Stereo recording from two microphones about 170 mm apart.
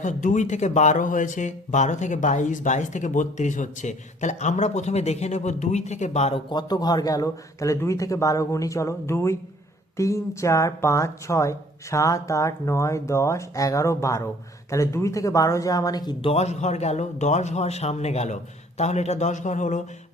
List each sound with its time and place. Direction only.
0.0 s speech: 45° left (ahead or behind)
6.5 s a man's voice: 25° left (ahead or behind)
16.3 s a man's voice: 40° left (ahead or behind)